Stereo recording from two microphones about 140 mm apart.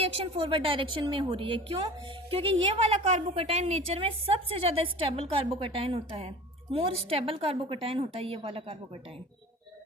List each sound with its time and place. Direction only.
0.0 s a woman's voice: 40° right (ahead or behind)
3.0 s a woman's voice: 45° right (ahead or behind)